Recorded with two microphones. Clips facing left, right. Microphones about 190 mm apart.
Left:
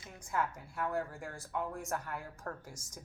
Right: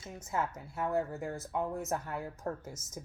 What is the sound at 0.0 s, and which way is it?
A woman's voice, 25° right (ahead or behind).